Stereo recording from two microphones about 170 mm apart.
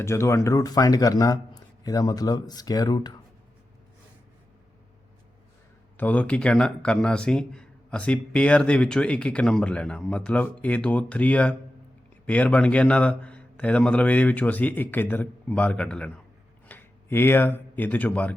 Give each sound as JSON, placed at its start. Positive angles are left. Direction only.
{"t": 0.0, "sound": "speech", "side_deg": 15}
{"t": 6.0, "sound": "speech", "side_deg": 10}